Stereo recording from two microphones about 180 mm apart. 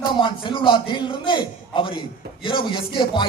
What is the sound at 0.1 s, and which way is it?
A man's voice, 25° left (ahead or behind).